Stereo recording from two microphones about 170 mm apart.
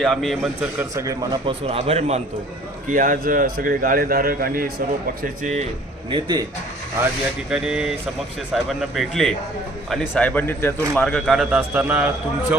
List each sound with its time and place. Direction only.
0.0 s a man's voice: centre (ahead or behind)
0.8 s a man's voice: 20° right (ahead or behind); by 2.2 s 40° right (ahead or behind)
2.9 s a man's voice: 50° right (ahead or behind)
5.2 s speech: 50° right (ahead or behind)
6.1 s speech: 25° right (ahead or behind)
7.5 s a man's voice: 5° right (ahead or behind)